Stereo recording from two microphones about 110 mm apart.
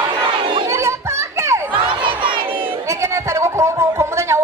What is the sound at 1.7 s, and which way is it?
Crowd, 50° right (ahead or behind).